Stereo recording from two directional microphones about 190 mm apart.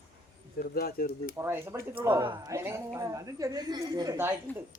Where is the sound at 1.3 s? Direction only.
15° right (ahead or behind).